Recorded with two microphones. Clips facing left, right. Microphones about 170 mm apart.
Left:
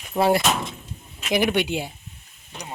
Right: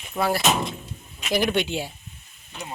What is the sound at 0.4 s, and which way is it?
Speech, 10° right (ahead or behind).